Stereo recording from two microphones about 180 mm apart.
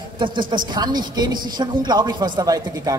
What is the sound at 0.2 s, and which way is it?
A woman's voice, 25° right (ahead or behind).